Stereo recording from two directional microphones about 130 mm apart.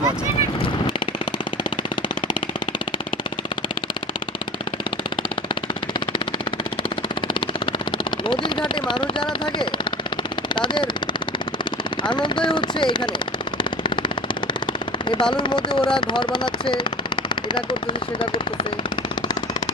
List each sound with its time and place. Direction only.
8.3 s vehicle: 40° left (ahead or behind)
10.5 s speech: 40° left (ahead or behind)
14.4 s machine gun: 40° left (ahead or behind)
16.0 s speech: 35° left (ahead or behind)